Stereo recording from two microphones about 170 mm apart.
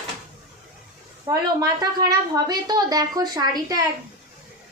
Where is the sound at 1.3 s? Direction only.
20° right (ahead or behind).